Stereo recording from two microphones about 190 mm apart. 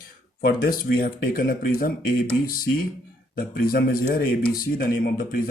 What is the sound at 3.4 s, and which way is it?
Speech, 50° left (ahead or behind).